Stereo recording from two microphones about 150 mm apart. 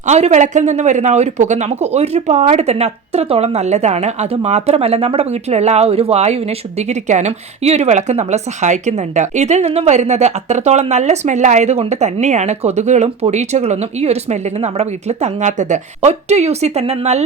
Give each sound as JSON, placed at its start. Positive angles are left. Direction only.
{"t": 0.0, "sound": "speech", "side_deg": -50}